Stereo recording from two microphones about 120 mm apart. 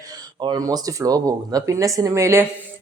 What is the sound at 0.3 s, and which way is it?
A man's voice, 35° right (ahead or behind).